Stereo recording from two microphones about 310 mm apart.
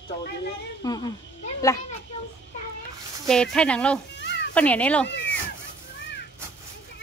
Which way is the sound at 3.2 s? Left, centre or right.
Centre.